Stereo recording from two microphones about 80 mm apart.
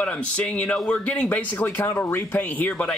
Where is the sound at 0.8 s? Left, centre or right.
Centre.